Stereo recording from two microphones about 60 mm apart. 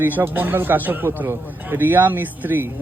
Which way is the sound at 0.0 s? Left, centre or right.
Right.